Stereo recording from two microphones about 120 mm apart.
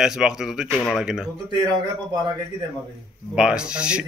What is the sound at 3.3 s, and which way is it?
Speech, 5° right (ahead or behind).